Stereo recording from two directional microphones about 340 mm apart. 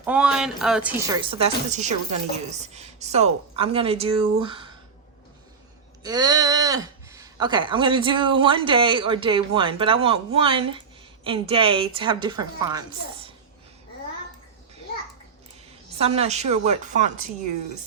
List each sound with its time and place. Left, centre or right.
0.0 s speech: centre
6.0 s speech: centre
16.0 s a woman's voice: centre